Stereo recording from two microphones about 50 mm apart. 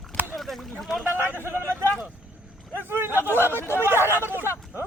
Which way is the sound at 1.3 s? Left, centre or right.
Right.